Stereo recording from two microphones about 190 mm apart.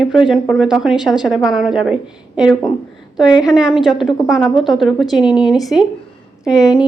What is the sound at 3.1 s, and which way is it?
A woman's voice, centre (ahead or behind).